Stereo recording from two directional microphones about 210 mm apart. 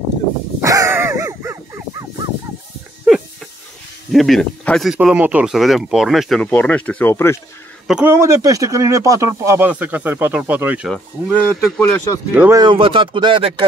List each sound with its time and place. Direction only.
0.6 s crow: 15° right (ahead or behind)
4.1 s speech: centre (ahead or behind)
7.8 s speech: 5° right (ahead or behind)
11.8 s speech: 5° left (ahead or behind)
12.4 s speech: 10° right (ahead or behind)
12.6 s speech: 25° right (ahead or behind)